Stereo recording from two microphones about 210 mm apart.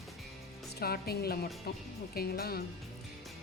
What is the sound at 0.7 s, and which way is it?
Speech, 45° left (ahead or behind).